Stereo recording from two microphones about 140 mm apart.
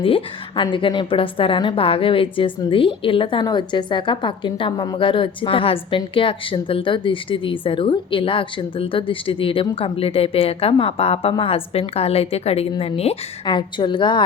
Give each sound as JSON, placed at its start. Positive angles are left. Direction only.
{"t": 0.0, "sound": "a woman's voice", "side_deg": 40}
{"t": 13.4, "sound": "a woman's voice", "side_deg": 35}